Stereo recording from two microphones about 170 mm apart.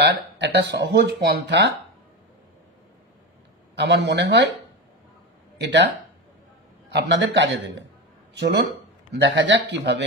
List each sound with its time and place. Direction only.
0.0 s speech: 85° right
3.7 s speech: 90° right
5.6 s speech: 90° right
6.9 s speech: 90° right
9.1 s speech: 90° right